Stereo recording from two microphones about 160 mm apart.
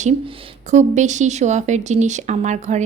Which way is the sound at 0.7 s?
50° right (ahead or behind).